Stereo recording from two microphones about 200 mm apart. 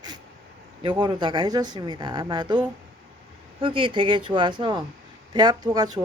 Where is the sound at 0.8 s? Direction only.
20° right (ahead or behind).